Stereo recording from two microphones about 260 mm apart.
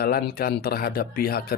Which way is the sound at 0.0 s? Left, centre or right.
Left.